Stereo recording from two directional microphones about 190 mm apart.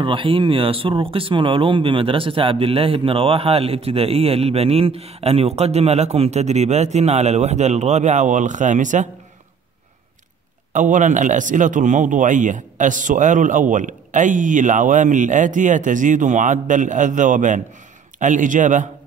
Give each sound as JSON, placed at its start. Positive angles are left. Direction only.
{"t": 0.0, "sound": "speech", "side_deg": -25}
{"t": 10.7, "sound": "speech", "side_deg": -40}